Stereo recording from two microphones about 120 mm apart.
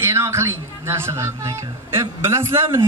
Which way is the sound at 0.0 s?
20° right (ahead or behind).